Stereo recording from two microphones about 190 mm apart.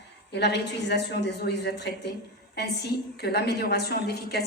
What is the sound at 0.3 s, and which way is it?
A woman's voice, 60° left (ahead or behind).